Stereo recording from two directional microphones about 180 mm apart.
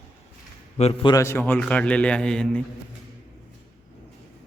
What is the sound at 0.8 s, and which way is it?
Speech, 35° left (ahead or behind).